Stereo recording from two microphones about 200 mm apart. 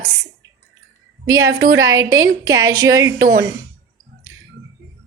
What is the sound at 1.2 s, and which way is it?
A woman's voice, 15° right (ahead or behind).